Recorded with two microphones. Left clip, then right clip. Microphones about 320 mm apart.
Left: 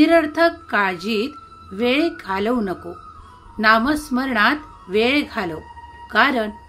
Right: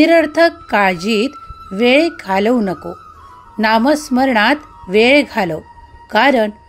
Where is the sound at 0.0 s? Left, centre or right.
Right.